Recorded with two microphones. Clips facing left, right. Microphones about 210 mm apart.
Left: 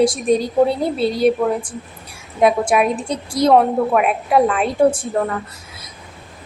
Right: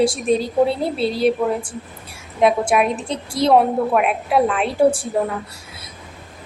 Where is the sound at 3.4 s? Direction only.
Centre (ahead or behind).